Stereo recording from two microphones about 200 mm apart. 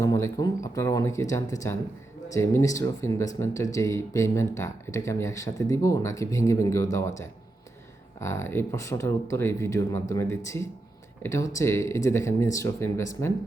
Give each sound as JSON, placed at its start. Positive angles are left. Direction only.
{"t": 0.0, "sound": "speech", "side_deg": 15}
{"t": 8.2, "sound": "speech", "side_deg": 15}